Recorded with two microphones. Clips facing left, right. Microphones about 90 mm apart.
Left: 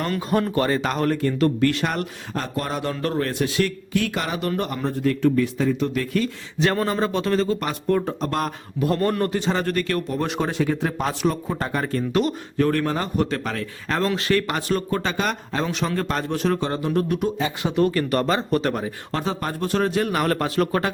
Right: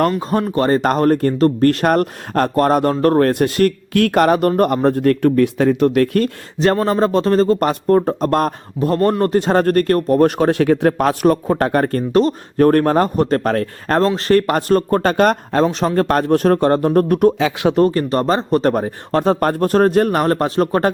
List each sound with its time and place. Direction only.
0.2 s a man's voice: 35° right (ahead or behind); by 6.3 s 60° right (ahead or behind)
6.9 s speech: 35° right (ahead or behind)
9.2 s speech: 45° right (ahead or behind)
12.1 s speech: 40° right (ahead or behind)
15.6 s speech: 40° right (ahead or behind)
16.0 s speech: 55° right (ahead or behind)
17.3 s speech: 85° right
17.7 s speech: 35° right (ahead or behind)